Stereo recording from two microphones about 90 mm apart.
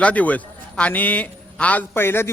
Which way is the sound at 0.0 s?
15° left (ahead or behind).